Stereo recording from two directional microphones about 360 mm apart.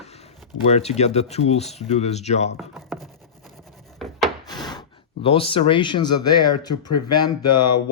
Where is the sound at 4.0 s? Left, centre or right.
Centre.